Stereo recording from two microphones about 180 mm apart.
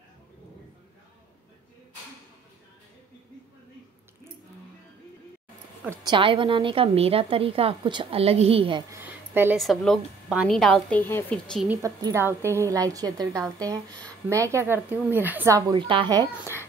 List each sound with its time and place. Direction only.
6.0 s a woman's voice: 30° right (ahead or behind)
8.9 s a sound: 10° right (ahead or behind)
9.6 s a woman's voice: centre (ahead or behind)
11.7 s a woman's voice: 15° right (ahead or behind)
15.7 s a woman's voice: 30° right (ahead or behind)